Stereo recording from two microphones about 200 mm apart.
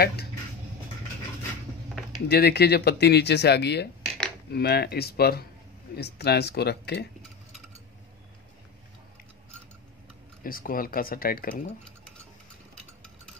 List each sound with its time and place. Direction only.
0.0 s speech: 55° left (ahead or behind)
2.2 s speech: 55° left (ahead or behind)
10.4 s speech: 45° left (ahead or behind)